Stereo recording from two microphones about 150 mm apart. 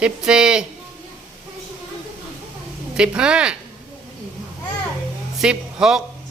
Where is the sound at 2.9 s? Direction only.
5° right (ahead or behind).